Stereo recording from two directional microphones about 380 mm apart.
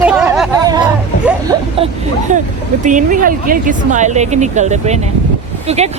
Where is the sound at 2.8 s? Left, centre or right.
Right.